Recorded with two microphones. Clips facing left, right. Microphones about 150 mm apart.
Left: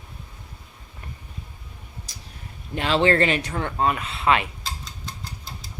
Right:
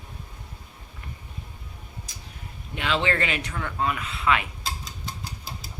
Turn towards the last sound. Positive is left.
turn(degrees=-5)  # may be behind; listen again after turning